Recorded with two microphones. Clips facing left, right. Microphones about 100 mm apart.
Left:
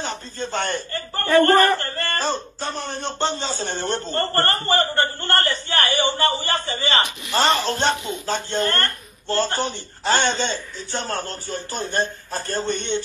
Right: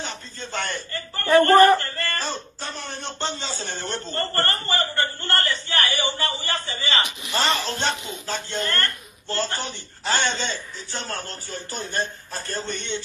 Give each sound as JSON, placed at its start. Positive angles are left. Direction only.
{"t": 0.0, "sound": "a man's voice", "side_deg": 40}
{"t": 8.5, "sound": "a man's voice", "side_deg": 40}